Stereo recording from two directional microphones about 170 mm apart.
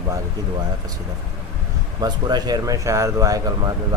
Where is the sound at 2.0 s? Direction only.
25° right (ahead or behind).